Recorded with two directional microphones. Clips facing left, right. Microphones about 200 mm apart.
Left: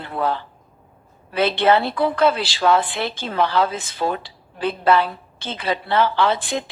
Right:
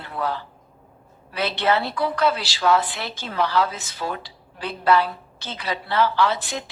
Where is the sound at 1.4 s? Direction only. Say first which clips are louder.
Left 4 dB; 55° left (ahead or behind).